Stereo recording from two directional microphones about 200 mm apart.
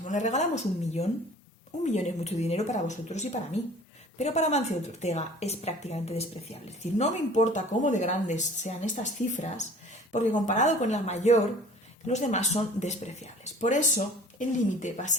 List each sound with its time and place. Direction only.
0.1 s a woman's voice: 35° left (ahead or behind)